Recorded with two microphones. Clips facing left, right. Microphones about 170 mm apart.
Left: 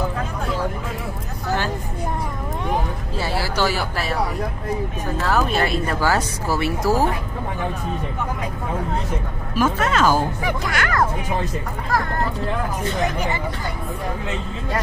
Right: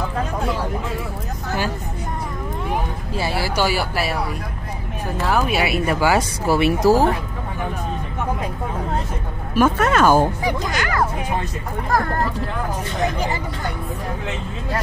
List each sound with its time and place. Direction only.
3.2 s a sound: 10° right (ahead or behind)
5.2 s speech: 10° right (ahead or behind)
9.6 s speech: 55° right (ahead or behind)
10.4 s speech: 20° right (ahead or behind)